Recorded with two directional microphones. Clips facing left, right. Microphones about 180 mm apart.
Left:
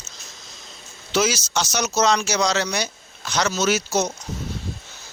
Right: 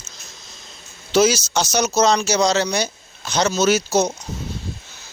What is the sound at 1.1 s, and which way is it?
Speech, 35° right (ahead or behind).